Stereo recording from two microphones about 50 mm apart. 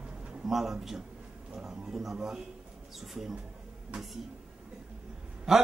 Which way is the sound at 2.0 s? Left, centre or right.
Centre.